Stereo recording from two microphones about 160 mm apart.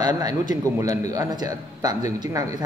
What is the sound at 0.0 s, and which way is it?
Speech, 25° right (ahead or behind).